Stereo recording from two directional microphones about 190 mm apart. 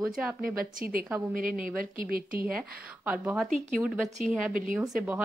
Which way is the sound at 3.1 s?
5° right (ahead or behind).